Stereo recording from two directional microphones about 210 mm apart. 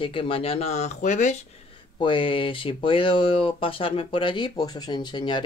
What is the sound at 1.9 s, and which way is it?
Speech, 25° left (ahead or behind).